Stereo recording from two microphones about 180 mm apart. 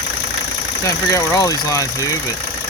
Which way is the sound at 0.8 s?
15° left (ahead or behind).